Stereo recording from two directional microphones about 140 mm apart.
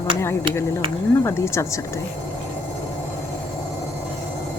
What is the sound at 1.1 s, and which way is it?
Speech, 20° left (ahead or behind).